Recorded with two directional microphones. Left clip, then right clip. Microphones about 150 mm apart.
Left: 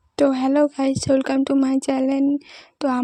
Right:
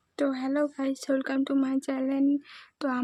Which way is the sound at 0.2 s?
45° left (ahead or behind).